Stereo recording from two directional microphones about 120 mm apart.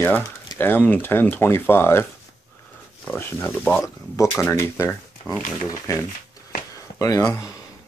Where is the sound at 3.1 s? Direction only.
15° left (ahead or behind).